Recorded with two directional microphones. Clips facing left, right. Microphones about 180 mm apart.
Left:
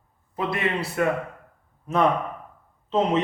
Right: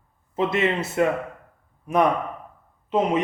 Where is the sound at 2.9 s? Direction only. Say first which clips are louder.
Right 1 dB; 10° right (ahead or behind).